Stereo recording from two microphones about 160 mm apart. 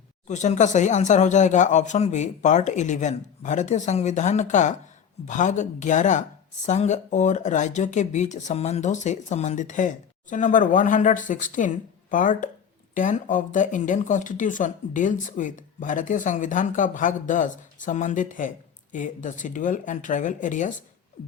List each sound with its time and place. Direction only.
0.3 s speech: 45° left (ahead or behind)